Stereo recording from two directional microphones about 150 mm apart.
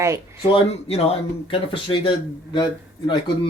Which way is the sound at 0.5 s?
40° left (ahead or behind).